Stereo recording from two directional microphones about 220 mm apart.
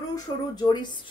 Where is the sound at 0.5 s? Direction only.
20° left (ahead or behind).